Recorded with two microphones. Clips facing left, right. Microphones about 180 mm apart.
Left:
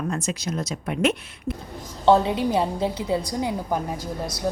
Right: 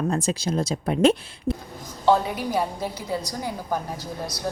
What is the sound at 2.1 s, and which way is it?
Speech, 25° left (ahead or behind).